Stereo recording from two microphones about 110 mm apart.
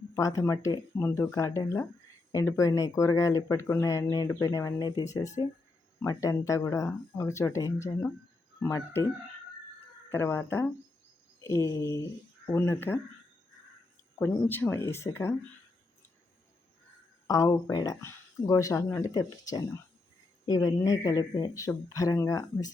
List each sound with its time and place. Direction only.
0.2 s speech: 30° left (ahead or behind)
10.1 s speech: 20° left (ahead or behind)
14.2 s speech: 20° left (ahead or behind)
17.2 s speech: 30° left (ahead or behind)